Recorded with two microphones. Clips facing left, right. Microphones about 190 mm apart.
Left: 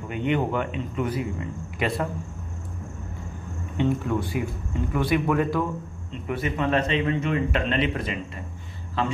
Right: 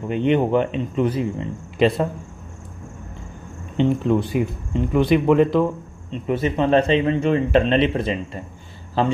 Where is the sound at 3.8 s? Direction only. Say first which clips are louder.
Right 6 dB; 20° right (ahead or behind).